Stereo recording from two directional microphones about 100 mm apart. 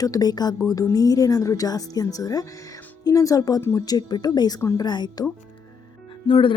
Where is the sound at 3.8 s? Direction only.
40° left (ahead or behind).